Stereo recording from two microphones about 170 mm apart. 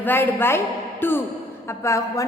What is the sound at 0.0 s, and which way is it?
A woman's voice, 10° left (ahead or behind).